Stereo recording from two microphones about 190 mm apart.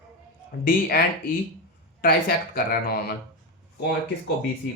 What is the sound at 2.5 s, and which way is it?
Speech, 50° left (ahead or behind).